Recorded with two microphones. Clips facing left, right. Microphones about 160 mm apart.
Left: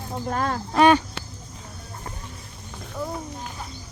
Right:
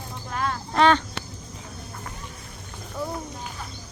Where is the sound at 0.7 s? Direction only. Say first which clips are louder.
Left 2 dB; 10° left (ahead or behind).